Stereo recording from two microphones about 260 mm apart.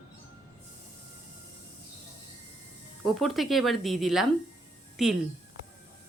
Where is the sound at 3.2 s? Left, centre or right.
Centre.